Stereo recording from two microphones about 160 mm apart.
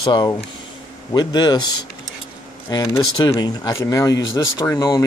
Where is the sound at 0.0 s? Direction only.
30° left (ahead or behind).